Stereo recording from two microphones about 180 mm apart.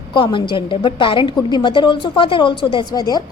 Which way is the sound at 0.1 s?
25° left (ahead or behind).